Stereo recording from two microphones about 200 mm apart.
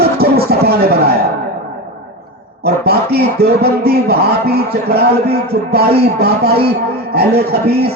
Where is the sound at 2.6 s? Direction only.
50° right (ahead or behind).